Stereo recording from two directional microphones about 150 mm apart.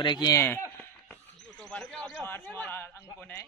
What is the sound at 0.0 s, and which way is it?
Mantra, 30° left (ahead or behind).